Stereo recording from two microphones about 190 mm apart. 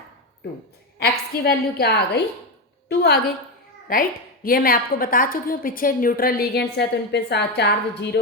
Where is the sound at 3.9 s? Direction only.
50° left (ahead or behind).